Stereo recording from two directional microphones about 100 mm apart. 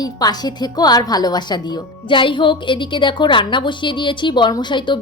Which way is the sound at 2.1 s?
55° left (ahead or behind).